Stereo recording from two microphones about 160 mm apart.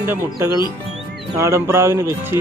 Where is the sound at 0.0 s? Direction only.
15° right (ahead or behind).